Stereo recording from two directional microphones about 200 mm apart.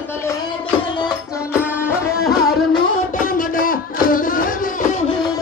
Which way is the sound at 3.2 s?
45° left (ahead or behind).